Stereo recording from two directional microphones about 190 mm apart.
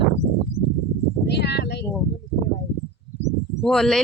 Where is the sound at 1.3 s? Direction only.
60° left (ahead or behind).